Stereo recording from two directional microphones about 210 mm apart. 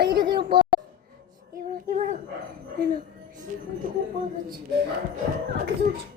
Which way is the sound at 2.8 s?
45° right (ahead or behind).